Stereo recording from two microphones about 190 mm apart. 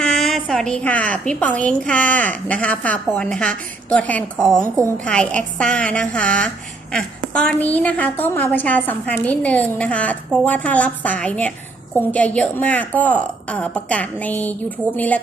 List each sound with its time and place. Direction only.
0.0 s a woman's voice: centre (ahead or behind)